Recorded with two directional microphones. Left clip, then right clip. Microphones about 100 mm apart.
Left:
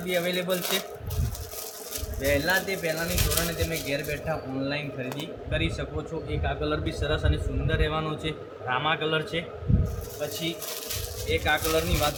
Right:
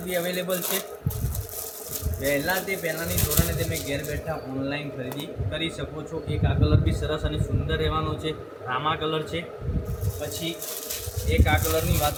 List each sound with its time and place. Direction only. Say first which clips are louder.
0.1 s speech: even; 10° left (ahead or behind)
2.2 s speech: left 1 dB; 10° left (ahead or behind)
11.3 s speech: even; 20° left (ahead or behind)